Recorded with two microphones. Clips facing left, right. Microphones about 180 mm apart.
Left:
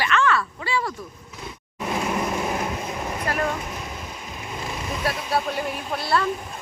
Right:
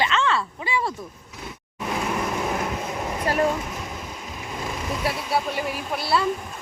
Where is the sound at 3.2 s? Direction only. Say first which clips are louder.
Right 4 dB; 25° right (ahead or behind).